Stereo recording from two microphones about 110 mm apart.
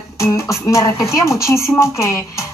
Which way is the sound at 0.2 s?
25° left (ahead or behind).